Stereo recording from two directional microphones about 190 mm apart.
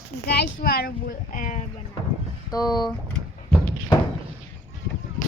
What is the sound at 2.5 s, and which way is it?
Speech, 20° left (ahead or behind).